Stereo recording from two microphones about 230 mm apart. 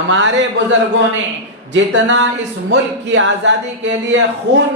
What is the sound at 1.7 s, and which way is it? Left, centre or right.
Speech, right.